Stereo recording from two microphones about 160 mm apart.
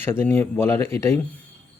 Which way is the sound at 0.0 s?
15° left (ahead or behind).